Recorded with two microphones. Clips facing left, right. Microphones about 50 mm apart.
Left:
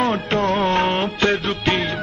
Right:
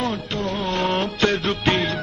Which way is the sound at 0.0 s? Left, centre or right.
Left.